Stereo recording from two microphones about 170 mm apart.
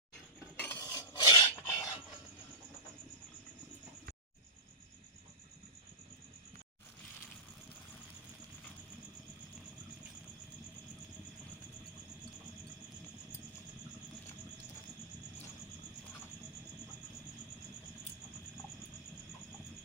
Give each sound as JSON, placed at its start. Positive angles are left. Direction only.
{"t": 0.6, "sound": "stir", "side_deg": 15}